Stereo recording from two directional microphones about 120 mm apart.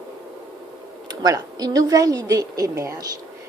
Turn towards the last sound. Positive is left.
turn(degrees=-25)  # may be behind; listen again after turning